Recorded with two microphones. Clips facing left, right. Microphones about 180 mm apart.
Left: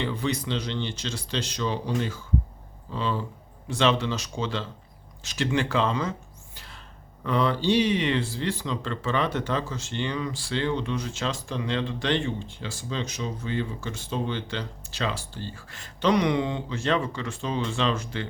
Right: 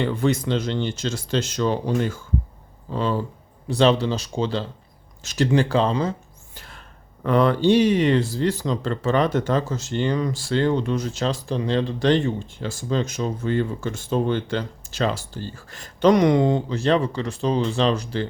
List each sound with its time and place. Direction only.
0.0 s speech: 50° right (ahead or behind); by 6.1 s 35° right (ahead or behind)
6.6 s a sound: 50° right (ahead or behind)
7.3 s speech: 55° right (ahead or behind); by 18.3 s 35° right (ahead or behind)